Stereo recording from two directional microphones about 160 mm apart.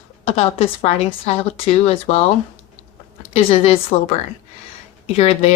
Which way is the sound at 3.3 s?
40° left (ahead or behind).